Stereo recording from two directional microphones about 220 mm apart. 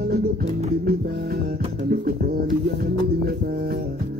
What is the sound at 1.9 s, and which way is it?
Music, 40° right (ahead or behind).